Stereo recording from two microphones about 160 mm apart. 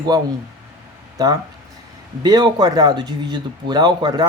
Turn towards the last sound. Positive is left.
turn(degrees=-25)  # may be behind; listen again after turning